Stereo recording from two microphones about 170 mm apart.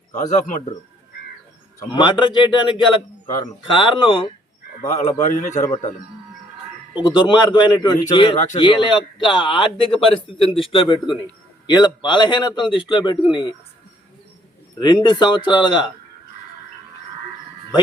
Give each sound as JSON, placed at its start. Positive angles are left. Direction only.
{"t": 0.1, "sound": "a man's voice", "side_deg": 45}
{"t": 1.9, "sound": "a man's voice", "side_deg": 25}
{"t": 5.2, "sound": "a man's voice", "side_deg": 45}
{"t": 7.1, "sound": "a man's voice", "side_deg": 25}
{"t": 14.8, "sound": "a man's voice", "side_deg": 25}